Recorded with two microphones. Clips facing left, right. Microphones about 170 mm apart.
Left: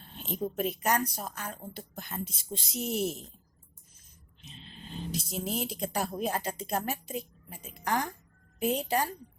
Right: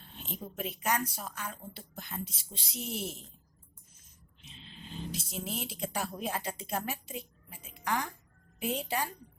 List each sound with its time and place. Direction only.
0.3 s a woman's voice: 40° left (ahead or behind)
5.1 s a woman's voice: 40° left (ahead or behind)